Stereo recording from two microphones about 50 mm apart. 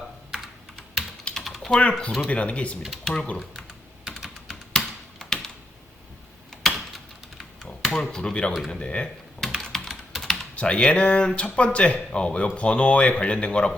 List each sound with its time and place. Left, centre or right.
1.3 s typing: centre
1.8 s speech: left
2.8 s speech: centre
3.2 s speech: centre
4.0 s typing: centre
6.6 s typing: centre
7.9 s speech: centre
8.5 s speech: centre
8.8 s speech: left
9.6 s typing: centre
10.5 s speech: left